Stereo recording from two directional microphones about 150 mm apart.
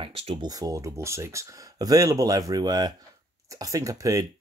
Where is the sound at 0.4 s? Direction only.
25° right (ahead or behind).